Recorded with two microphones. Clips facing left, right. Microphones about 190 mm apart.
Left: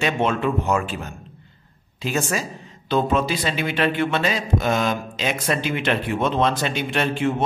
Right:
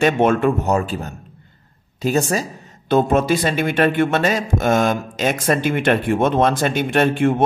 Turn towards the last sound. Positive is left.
turn(degrees=-50)  # may be behind; listen again after turning